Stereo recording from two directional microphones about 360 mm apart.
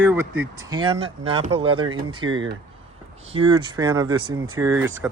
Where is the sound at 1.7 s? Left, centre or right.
Right.